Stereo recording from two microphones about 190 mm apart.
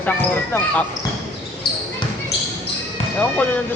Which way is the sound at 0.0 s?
10° left (ahead or behind).